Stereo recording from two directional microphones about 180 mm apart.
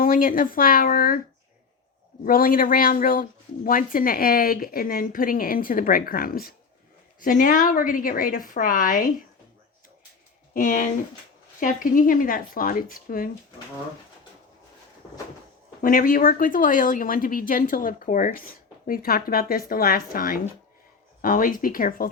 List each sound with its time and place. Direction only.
0.0 s speech: 50° left (ahead or behind)
2.2 s speech: 55° left (ahead or behind)
10.5 s speech: 45° left (ahead or behind)
15.8 s speech: 50° left (ahead or behind)